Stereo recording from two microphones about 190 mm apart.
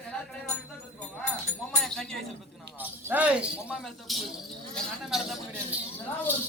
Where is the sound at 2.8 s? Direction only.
10° right (ahead or behind).